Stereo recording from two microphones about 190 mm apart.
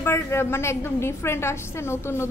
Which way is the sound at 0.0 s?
15° left (ahead or behind).